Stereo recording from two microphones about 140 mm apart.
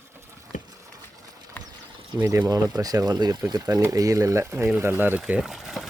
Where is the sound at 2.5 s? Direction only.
25° right (ahead or behind).